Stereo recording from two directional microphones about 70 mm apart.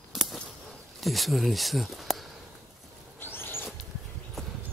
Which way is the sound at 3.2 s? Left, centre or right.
Left.